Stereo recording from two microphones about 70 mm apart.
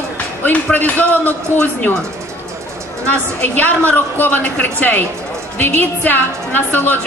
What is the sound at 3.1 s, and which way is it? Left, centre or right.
A woman's voice, left.